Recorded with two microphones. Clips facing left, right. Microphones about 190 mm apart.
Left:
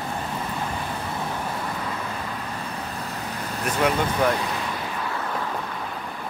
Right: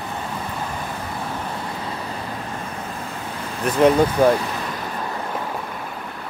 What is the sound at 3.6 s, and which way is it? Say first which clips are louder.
Speech: right 8 dB; 35° right (ahead or behind).